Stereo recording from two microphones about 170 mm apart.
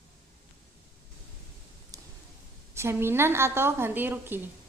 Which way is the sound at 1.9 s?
20° right (ahead or behind).